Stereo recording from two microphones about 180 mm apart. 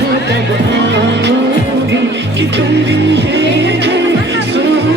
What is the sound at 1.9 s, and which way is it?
Music, 75° right (ahead or behind).